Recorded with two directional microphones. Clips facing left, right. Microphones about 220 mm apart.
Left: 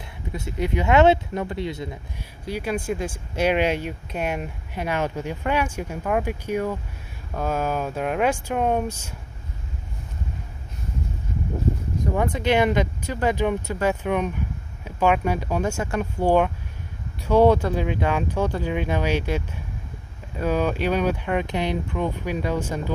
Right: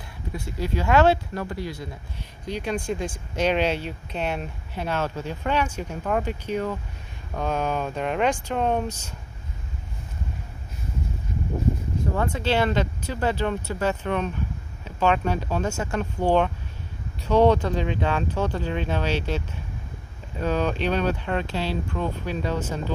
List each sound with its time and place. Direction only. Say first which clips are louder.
0.4 s speech: left 3 dB; 20° left (ahead or behind)
2.1 s speech: even; 10° left (ahead or behind)
12.2 s speech: left 3 dB; 15° left (ahead or behind)